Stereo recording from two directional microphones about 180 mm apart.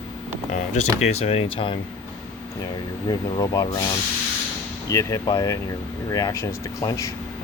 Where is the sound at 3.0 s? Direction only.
20° left (ahead or behind).